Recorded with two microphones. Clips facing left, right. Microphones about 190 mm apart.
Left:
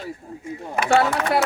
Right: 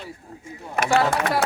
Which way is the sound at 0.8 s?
50° right (ahead or behind).